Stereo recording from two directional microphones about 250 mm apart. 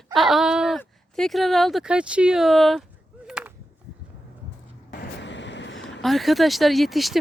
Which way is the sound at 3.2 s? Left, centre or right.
Centre.